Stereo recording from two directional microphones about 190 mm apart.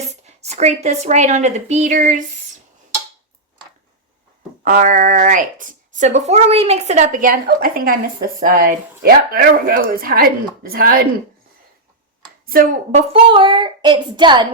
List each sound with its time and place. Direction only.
0.1 s a woman's voice: 35° right (ahead or behind)
4.6 s a woman's voice: 45° right (ahead or behind)
12.5 s a child's voice: 45° right (ahead or behind); by 14.4 s 25° right (ahead or behind)